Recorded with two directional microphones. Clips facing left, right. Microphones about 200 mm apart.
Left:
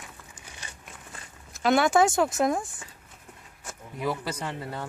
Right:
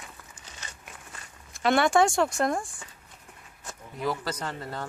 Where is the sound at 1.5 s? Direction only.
Centre (ahead or behind).